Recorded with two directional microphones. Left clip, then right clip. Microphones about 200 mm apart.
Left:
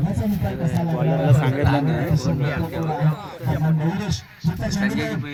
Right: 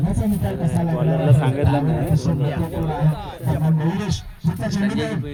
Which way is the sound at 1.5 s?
20° left (ahead or behind).